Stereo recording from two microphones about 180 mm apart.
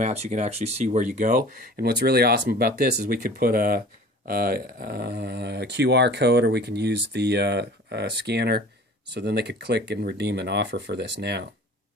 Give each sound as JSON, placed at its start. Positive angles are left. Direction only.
{"t": 0.0, "sound": "speech", "side_deg": -40}
{"t": 1.1, "sound": "speech", "side_deg": -45}